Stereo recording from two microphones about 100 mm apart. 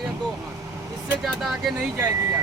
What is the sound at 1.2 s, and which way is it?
Speech, centre (ahead or behind).